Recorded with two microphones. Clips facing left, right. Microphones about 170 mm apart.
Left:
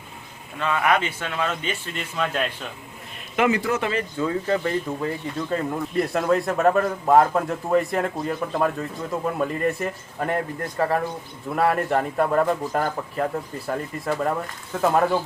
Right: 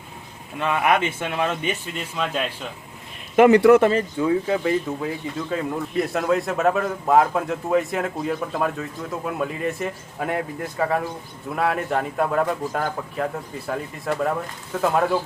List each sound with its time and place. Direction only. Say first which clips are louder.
0.6 s a man's voice: right 1 dB; 20° right (ahead or behind)
2.0 s speech: left 4 dB; centre (ahead or behind)
3.3 s speech: right 9 dB; 45° right (ahead or behind)
4.2 s speech: even; 10° right (ahead or behind)